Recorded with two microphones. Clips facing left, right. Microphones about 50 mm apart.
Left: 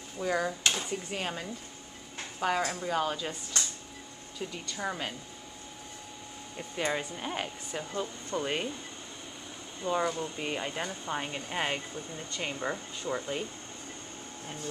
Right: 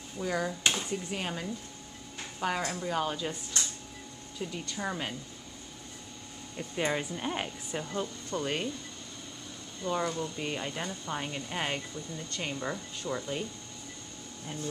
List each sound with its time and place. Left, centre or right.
0.2 s speech: centre
2.6 s speech: centre
4.4 s speech: centre
6.5 s speech: centre
8.0 s speech: centre
9.8 s speech: centre
11.9 s speech: left
12.3 s speech: centre